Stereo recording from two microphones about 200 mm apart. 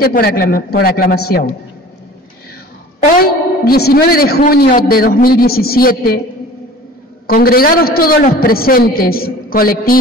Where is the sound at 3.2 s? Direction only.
50° left (ahead or behind).